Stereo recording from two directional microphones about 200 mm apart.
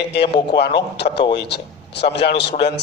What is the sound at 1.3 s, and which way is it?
A man's voice, 55° left (ahead or behind).